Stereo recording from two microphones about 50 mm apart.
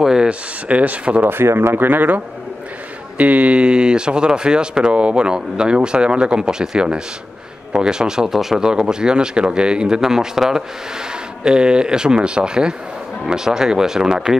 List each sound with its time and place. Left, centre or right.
0.0 s speech: centre
1.2 s speech: right
1.8 s a man's voice: right; by 14.3 s centre